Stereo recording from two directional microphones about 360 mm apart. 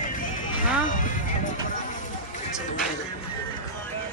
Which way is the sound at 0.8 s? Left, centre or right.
Left.